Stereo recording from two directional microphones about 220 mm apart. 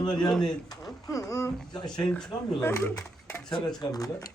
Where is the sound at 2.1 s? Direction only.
5° left (ahead or behind).